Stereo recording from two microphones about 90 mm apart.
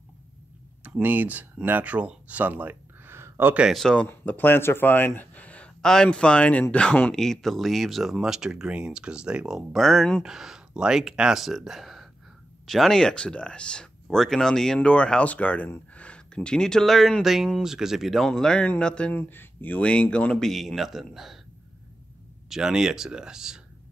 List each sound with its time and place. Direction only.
0.8 s speech: 20° right (ahead or behind)
3.7 s speech: 10° left (ahead or behind)
4.1 s speech: 20° left (ahead or behind); by 21.4 s centre (ahead or behind)
22.5 s speech: 5° right (ahead or behind)